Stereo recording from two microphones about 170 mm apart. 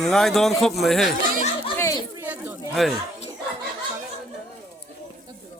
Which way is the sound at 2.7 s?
Centre (ahead or behind).